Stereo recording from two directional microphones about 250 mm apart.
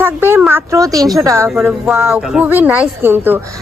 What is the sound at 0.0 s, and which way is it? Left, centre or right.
A woman's voice, centre.